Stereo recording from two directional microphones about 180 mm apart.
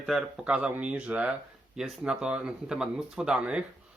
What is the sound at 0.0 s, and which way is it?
Speech, 5° right (ahead or behind).